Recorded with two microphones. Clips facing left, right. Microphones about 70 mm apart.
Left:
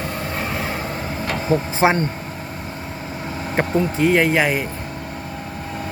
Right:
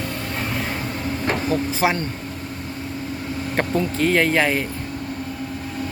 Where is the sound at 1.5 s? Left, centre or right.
Left.